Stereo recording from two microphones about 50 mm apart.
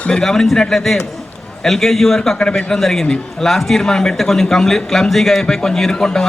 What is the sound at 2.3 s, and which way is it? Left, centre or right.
Speech, left.